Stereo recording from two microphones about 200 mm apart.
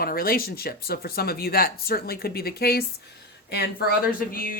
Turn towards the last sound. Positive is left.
turn(degrees=45)  # may be behind; listen again after turning